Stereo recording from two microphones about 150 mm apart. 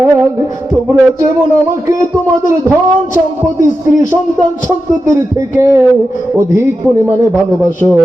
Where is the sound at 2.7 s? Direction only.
15° right (ahead or behind).